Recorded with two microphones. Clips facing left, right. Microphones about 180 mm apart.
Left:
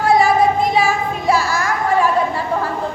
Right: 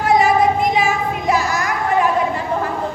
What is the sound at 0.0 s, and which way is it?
Child singing, 15° right (ahead or behind).